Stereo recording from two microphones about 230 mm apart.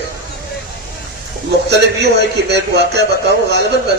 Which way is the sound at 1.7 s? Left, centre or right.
Right.